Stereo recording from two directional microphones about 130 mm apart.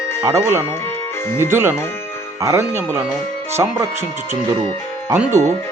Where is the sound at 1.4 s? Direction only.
20° right (ahead or behind).